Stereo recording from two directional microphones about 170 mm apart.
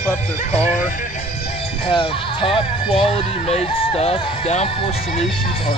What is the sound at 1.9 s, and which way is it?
Speech, 30° left (ahead or behind).